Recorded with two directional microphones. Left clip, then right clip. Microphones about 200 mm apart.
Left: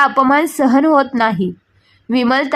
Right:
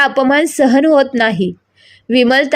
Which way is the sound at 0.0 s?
15° right (ahead or behind).